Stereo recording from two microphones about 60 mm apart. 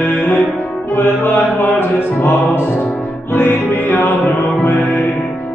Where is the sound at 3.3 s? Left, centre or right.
Left.